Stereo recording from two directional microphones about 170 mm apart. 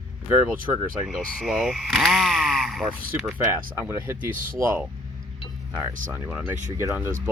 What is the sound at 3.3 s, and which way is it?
Speech, 15° right (ahead or behind).